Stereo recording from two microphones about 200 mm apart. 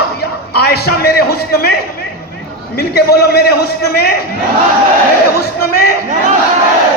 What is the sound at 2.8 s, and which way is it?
A man's voice, 50° left (ahead or behind).